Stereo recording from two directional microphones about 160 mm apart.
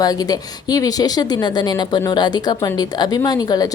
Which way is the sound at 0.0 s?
25° left (ahead or behind).